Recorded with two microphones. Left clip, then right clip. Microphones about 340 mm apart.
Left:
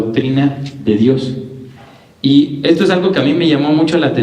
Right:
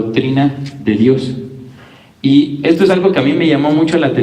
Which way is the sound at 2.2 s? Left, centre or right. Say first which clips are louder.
Even; centre.